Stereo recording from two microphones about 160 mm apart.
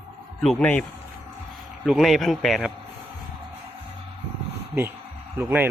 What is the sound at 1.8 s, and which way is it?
Speech, centre (ahead or behind).